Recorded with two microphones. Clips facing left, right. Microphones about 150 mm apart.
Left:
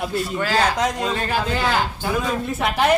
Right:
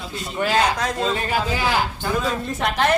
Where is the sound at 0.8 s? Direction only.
20° left (ahead or behind).